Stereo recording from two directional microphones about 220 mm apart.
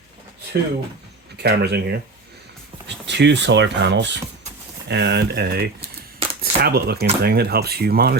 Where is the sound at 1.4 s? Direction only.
45° right (ahead or behind).